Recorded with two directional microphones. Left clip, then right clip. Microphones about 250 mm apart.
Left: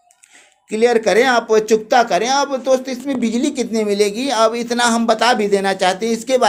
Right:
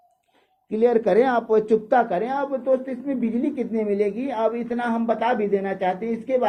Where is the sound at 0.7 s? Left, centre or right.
Centre; by 6.5 s left.